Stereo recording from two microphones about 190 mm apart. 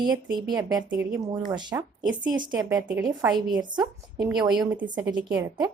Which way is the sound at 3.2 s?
10° right (ahead or behind).